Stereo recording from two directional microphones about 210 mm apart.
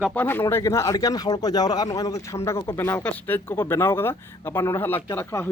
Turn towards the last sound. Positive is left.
turn(degrees=10)  # may be behind; listen again after turning